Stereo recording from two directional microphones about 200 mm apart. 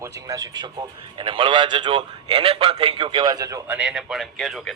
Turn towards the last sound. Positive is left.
turn(degrees=0)  # may be behind; listen again after turning